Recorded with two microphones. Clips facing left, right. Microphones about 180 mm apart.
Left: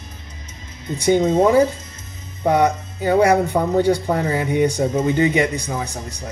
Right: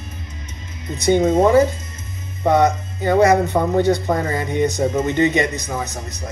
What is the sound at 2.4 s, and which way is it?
Speech, 10° left (ahead or behind).